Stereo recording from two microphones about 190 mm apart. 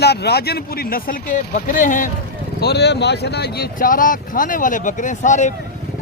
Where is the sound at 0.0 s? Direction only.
60° left (ahead or behind); by 2.0 s 45° left (ahead or behind).